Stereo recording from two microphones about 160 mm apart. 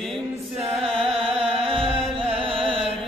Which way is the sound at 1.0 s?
Centre (ahead or behind).